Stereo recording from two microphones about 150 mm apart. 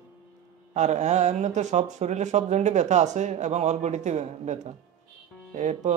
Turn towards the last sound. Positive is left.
turn(degrees=-50)  # may be behind; listen again after turning